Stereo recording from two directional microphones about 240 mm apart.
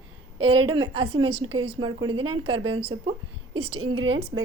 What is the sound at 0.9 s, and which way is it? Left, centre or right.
A woman's voice, right.